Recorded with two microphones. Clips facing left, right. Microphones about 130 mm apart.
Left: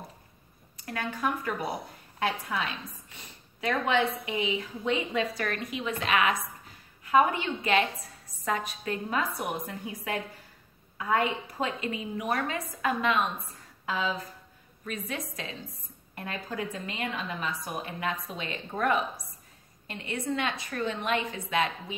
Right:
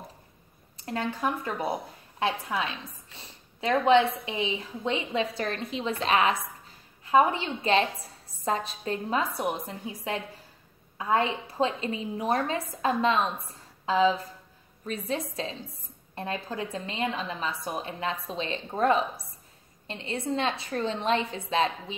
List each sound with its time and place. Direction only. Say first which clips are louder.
0.8 s a woman's voice: right 2 dB; 25° right (ahead or behind)
3.2 s a sound: right 2 dB; 30° right (ahead or behind)
4.3 s a woman's voice: left 1 dB; 30° right (ahead or behind)